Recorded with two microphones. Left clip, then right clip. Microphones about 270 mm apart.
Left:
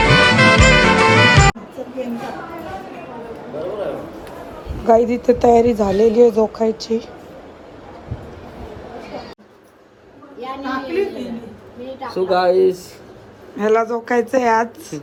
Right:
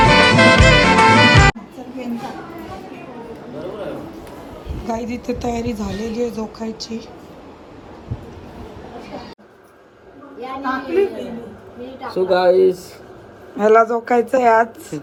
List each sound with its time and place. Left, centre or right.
0.0 s music: centre
4.9 s speech: centre
10.4 s a sound: centre
11.9 s speech: centre